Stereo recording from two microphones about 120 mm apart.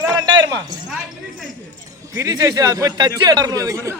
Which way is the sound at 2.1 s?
30° right (ahead or behind).